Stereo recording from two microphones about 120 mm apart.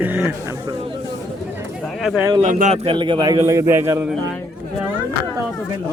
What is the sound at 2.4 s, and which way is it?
Speech, 85° right.